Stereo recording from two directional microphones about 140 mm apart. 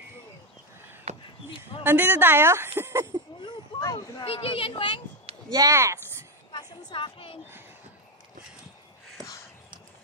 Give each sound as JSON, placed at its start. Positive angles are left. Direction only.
{"t": 1.1, "sound": "a sound", "side_deg": -50}
{"t": 1.8, "sound": "speech", "side_deg": -15}
{"t": 3.3, "sound": "a child's voice", "side_deg": 35}
{"t": 5.5, "sound": "speech", "side_deg": -25}
{"t": 6.9, "sound": "a woman's voice", "side_deg": 40}